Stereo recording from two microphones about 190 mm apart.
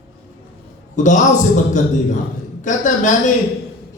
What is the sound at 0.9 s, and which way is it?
A woman's voice, 40° left (ahead or behind).